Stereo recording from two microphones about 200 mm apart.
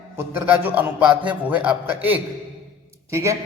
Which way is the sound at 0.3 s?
10° right (ahead or behind).